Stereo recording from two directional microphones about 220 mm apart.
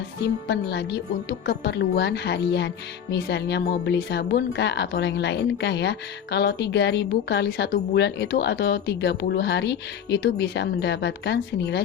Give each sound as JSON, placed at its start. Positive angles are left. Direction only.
{"t": 0.2, "sound": "speech", "side_deg": 50}